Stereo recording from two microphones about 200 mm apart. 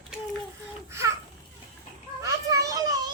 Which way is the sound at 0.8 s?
15° right (ahead or behind).